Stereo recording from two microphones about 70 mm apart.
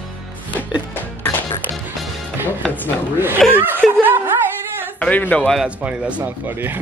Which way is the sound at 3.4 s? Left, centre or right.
Centre.